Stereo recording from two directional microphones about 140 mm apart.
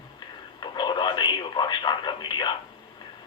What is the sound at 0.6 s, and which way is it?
Speech, 30° left (ahead or behind).